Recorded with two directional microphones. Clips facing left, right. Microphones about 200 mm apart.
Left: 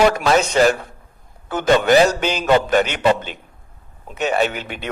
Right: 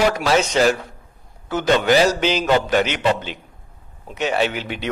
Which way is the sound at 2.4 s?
50° left (ahead or behind).